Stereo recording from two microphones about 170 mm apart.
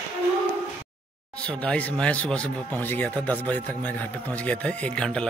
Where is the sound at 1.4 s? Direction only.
5° left (ahead or behind).